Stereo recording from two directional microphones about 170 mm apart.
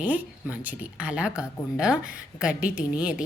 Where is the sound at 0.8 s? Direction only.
5° right (ahead or behind).